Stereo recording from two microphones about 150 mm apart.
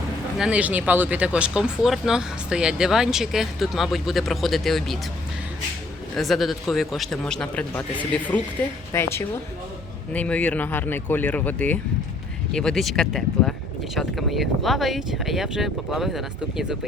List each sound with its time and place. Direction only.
0.3 s speech: 5° right (ahead or behind)
6.1 s speech: centre (ahead or behind)